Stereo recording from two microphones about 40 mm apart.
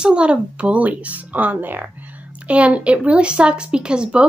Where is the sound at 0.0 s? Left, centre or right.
Right.